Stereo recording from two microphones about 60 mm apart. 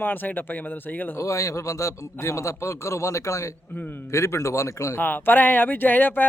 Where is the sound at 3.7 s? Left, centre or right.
Left.